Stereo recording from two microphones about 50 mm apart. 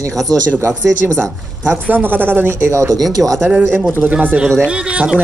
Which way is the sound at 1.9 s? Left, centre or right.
Right.